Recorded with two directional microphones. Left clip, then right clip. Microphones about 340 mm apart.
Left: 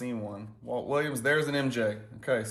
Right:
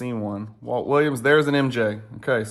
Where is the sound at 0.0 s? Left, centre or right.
Right.